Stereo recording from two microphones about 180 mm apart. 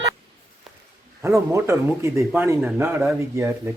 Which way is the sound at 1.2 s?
15° right (ahead or behind).